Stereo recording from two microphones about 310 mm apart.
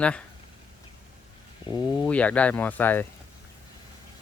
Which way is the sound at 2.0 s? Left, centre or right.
Centre.